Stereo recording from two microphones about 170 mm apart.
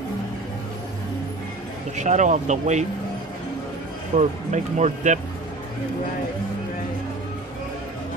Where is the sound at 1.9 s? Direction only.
45° right (ahead or behind).